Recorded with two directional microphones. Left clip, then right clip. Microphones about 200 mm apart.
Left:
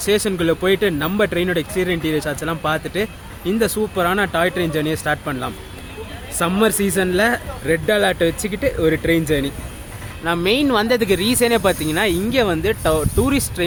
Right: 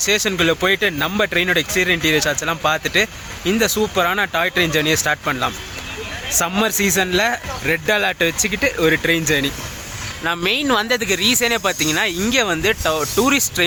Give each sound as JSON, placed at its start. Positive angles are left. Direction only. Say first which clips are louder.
{"t": 0.0, "sound": "speech", "louder": "right 1 dB", "side_deg": 5}
{"t": 10.2, "sound": "speech", "louder": "left 1 dB", "side_deg": 5}